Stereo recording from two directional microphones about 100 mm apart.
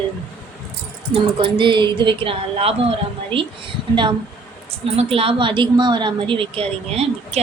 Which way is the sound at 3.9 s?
50° right (ahead or behind).